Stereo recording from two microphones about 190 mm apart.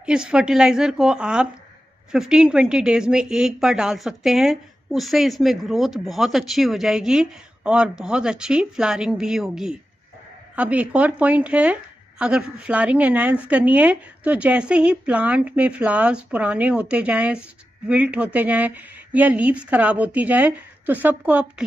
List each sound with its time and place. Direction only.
0.0 s a woman's voice: 5° right (ahead or behind)